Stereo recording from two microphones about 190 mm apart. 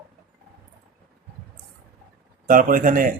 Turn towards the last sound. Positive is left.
turn(degrees=-45)  # may be behind; listen again after turning